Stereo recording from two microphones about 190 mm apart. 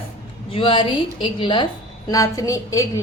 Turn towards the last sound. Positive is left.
turn(degrees=15)  # may be behind; listen again after turning